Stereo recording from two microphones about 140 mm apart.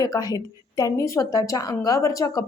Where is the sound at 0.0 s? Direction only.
25° left (ahead or behind).